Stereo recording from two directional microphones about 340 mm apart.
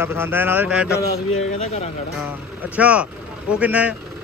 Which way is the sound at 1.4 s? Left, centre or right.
Centre.